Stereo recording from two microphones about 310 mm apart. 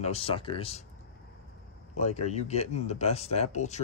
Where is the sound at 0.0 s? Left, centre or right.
Centre.